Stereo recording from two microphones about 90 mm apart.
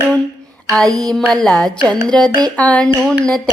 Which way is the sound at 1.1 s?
5° left (ahead or behind).